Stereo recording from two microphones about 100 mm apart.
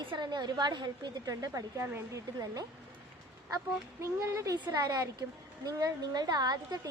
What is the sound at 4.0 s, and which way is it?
A woman's voice, 30° right (ahead or behind).